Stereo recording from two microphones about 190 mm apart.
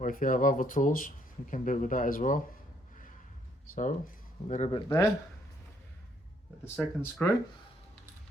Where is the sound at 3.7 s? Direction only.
45° left (ahead or behind).